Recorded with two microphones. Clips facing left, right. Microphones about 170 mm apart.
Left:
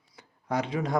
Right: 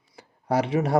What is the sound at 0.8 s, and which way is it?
Speech, 45° right (ahead or behind).